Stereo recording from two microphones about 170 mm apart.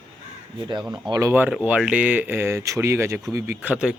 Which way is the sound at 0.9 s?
20° right (ahead or behind).